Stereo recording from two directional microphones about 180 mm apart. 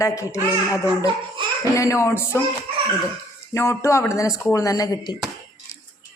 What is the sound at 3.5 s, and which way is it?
A woman's voice, 15° left (ahead or behind).